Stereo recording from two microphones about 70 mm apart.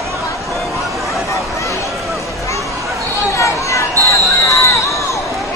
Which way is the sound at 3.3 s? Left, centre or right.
Left.